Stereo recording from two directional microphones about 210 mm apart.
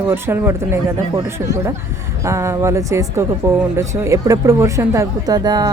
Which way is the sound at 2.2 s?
15° right (ahead or behind).